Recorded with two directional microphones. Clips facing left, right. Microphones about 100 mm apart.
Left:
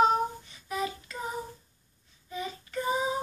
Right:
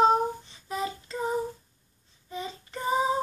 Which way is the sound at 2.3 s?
25° right (ahead or behind).